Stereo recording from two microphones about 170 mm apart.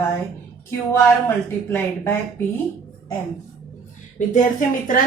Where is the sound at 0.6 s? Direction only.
10° left (ahead or behind).